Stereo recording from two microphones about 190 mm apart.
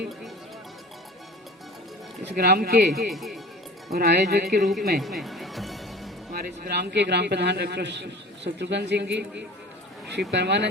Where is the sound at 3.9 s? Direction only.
55° right (ahead or behind).